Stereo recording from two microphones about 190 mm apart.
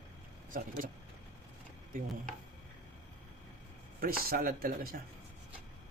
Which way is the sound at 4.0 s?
50° right (ahead or behind).